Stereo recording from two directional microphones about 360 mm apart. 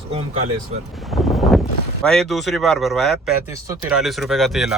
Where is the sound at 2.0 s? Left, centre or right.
Centre.